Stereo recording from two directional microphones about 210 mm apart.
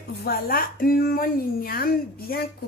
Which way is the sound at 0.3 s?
45° left (ahead or behind).